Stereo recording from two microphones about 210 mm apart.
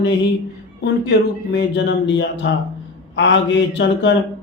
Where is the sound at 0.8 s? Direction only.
55° left (ahead or behind).